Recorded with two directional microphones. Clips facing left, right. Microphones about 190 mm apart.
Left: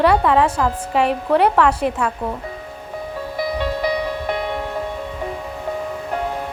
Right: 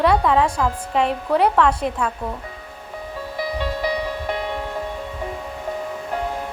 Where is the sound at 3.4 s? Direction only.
60° left (ahead or behind).